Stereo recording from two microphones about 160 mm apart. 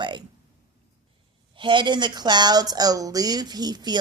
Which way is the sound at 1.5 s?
30° right (ahead or behind).